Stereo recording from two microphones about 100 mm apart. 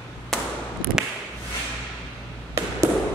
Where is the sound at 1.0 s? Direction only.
5° right (ahead or behind).